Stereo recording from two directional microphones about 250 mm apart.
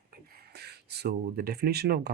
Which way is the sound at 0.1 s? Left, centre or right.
Right.